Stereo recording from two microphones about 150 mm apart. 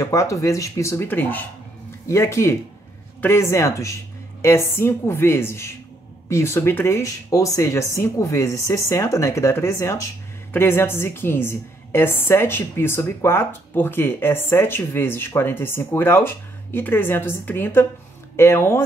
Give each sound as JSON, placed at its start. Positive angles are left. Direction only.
{"t": 0.0, "sound": "a woman's voice", "side_deg": 20}